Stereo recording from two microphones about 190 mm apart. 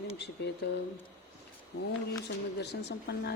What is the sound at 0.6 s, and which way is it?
Speech, 60° left (ahead or behind).